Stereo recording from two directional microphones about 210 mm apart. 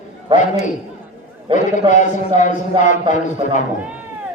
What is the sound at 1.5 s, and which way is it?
Speech, 35° left (ahead or behind).